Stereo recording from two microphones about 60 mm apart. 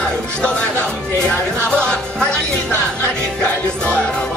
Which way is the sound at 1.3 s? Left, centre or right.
Left.